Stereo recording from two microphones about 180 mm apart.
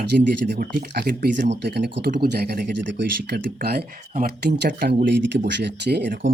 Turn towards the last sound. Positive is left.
turn(degrees=-70)  # may be behind; listen again after turning